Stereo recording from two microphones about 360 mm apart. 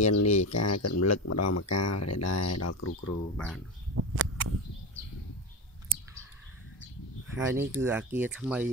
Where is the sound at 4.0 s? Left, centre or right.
Right.